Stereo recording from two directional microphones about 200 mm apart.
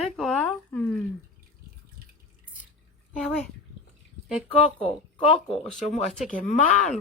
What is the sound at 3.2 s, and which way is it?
Speech, 5° left (ahead or behind).